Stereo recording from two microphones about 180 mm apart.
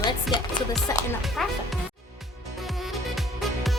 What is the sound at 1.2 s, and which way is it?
Speech, centre (ahead or behind).